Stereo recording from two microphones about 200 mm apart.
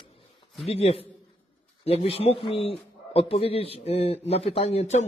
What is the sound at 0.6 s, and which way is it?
A man's voice, 30° left (ahead or behind).